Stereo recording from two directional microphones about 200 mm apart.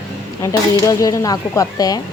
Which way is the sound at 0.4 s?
15° left (ahead or behind).